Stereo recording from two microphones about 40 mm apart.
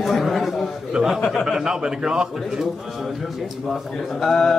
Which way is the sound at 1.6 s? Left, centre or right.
Right.